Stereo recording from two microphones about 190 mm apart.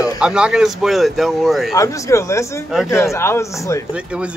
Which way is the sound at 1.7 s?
15° left (ahead or behind).